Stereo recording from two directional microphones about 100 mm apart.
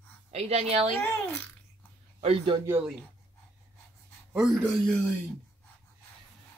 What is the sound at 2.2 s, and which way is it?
Speech, 65° right (ahead or behind).